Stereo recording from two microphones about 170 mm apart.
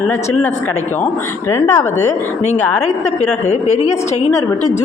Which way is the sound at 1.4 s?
15° left (ahead or behind).